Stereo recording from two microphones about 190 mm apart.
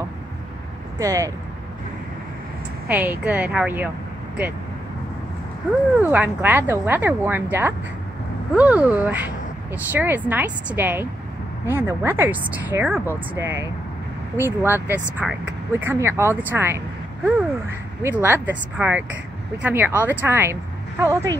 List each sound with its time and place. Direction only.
0.9 s speech: 15° right (ahead or behind)
2.9 s speech: 10° right (ahead or behind)
6.0 s speech: 10° right (ahead or behind)
15.7 s speech: 10° right (ahead or behind)